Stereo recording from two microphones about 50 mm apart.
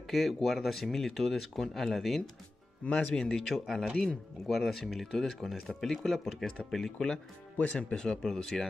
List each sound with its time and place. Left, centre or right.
0.1 s speech: centre
2.8 s speech: left